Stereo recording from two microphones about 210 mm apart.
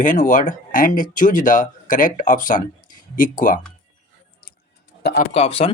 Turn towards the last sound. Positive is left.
turn(degrees=25)  # may be behind; listen again after turning